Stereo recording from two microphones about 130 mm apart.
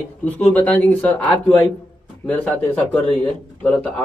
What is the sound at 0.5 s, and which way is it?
Speech, 10° left (ahead or behind).